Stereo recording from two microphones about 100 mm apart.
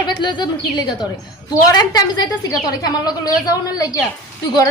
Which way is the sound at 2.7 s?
40° left (ahead or behind).